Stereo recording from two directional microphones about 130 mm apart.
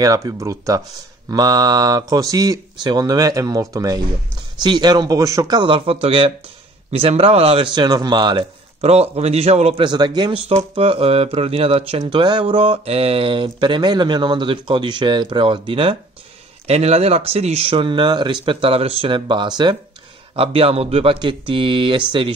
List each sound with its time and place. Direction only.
0.0 s speech: 25° right (ahead or behind)
8.8 s speech: 50° right (ahead or behind)
9.8 s speech: 35° right (ahead or behind)
10.7 s speech: 45° right (ahead or behind)
12.0 s speech: 35° right (ahead or behind)
16.6 s speech: 55° right (ahead or behind); by 19.8 s 35° right (ahead or behind)
20.3 s speech: 45° right (ahead or behind)